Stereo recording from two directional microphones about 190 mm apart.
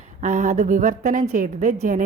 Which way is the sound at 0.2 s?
40° right (ahead or behind).